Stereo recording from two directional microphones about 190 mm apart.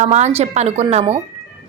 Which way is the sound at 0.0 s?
35° right (ahead or behind).